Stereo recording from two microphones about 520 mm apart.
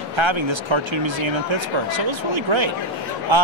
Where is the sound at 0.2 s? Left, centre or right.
Right.